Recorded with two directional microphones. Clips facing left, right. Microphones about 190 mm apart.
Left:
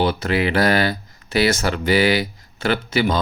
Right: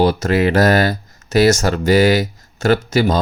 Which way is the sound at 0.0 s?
40° right (ahead or behind).